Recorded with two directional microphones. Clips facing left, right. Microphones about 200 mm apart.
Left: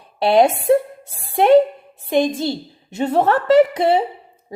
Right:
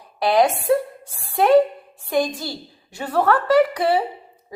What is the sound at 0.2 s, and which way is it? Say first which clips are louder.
A woman's voice: left 3 dB; 25° left (ahead or behind).